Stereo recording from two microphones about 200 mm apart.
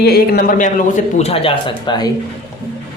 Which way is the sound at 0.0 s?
50° left (ahead or behind).